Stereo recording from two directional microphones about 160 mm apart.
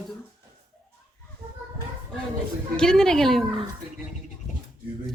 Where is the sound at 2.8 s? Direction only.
5° left (ahead or behind).